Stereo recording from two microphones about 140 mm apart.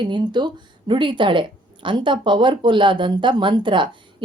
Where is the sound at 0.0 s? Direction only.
35° right (ahead or behind).